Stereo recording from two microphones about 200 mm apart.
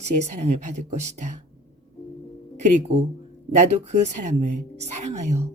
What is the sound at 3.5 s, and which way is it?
A woman's voice, 35° right (ahead or behind).